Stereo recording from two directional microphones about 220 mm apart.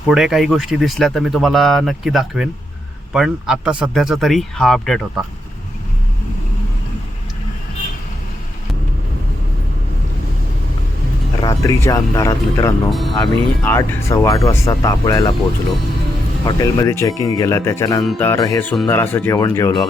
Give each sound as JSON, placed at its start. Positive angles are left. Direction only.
{"t": 0.1, "sound": "speech", "side_deg": 0}
{"t": 11.4, "sound": "speech", "side_deg": 15}
{"t": 12.9, "sound": "speech", "side_deg": 0}
{"t": 16.5, "sound": "speech", "side_deg": 15}
{"t": 18.0, "sound": "speech", "side_deg": 0}
{"t": 18.3, "sound": "speech", "side_deg": 15}